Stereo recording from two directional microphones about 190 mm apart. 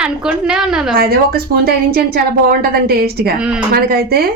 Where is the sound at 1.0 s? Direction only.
50° right (ahead or behind).